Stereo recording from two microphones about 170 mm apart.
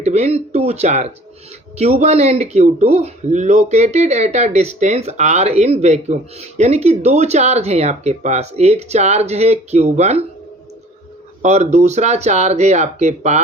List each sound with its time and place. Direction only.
0.0 s speech: 40° right (ahead or behind)
11.4 s speech: 40° right (ahead or behind)